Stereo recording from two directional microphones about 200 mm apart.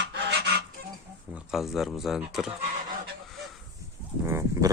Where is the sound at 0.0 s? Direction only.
60° right (ahead or behind).